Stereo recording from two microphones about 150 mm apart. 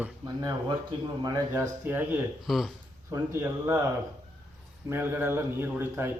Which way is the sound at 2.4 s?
Centre (ahead or behind).